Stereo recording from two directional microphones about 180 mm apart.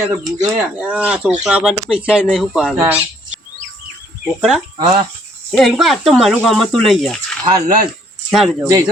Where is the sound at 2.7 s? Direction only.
15° right (ahead or behind).